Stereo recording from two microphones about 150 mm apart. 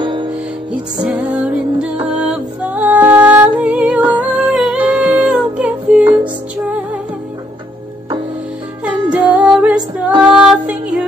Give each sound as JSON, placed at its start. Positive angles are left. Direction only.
{"t": 0.0, "sound": "music", "side_deg": -30}
{"t": 0.3, "sound": "music", "side_deg": -5}
{"t": 8.8, "sound": "music", "side_deg": -10}